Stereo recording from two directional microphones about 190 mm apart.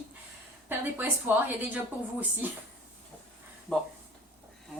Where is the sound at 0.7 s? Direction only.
10° right (ahead or behind).